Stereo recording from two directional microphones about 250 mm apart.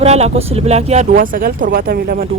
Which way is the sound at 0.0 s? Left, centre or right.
Right.